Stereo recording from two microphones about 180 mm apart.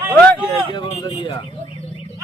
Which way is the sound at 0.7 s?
25° left (ahead or behind).